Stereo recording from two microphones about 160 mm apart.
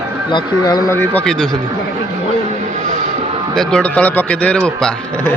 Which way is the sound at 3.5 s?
5° left (ahead or behind).